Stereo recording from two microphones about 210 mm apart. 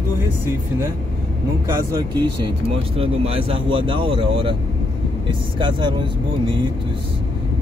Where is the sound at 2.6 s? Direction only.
25° right (ahead or behind).